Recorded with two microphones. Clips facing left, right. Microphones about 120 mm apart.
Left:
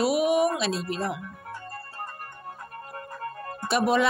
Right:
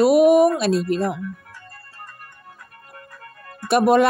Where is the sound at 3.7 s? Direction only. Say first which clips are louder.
Right 7 dB; 55° right (ahead or behind).